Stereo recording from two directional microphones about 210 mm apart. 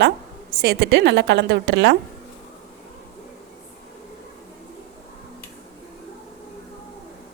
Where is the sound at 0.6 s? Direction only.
55° right (ahead or behind).